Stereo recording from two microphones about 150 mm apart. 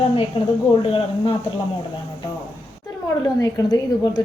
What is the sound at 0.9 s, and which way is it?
Speech, 35° left (ahead or behind).